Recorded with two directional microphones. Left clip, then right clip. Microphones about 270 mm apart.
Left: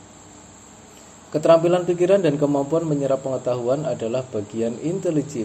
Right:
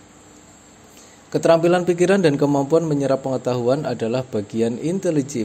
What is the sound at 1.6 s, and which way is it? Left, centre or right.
Speech, right.